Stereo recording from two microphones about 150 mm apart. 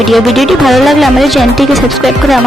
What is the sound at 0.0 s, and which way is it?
Speech, centre (ahead or behind).